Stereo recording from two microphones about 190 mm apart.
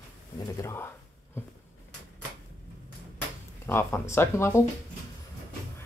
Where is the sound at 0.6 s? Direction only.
10° left (ahead or behind).